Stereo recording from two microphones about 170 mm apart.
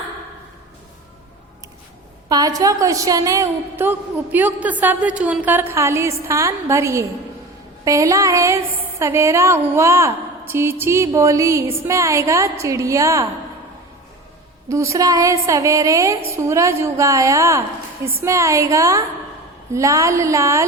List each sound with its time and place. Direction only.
2.3 s a woman's voice: 20° right (ahead or behind)
14.7 s a woman's voice: 15° right (ahead or behind)